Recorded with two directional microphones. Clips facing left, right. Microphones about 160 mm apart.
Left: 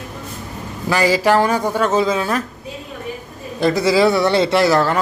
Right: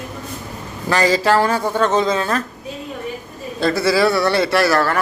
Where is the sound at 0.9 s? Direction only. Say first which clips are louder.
Left 1 dB; 10° left (ahead or behind).